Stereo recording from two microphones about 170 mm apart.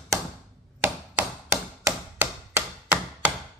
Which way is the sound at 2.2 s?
15° right (ahead or behind).